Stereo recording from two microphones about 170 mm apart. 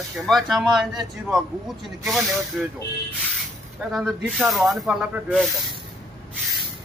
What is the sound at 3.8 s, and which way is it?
Speech, centre (ahead or behind).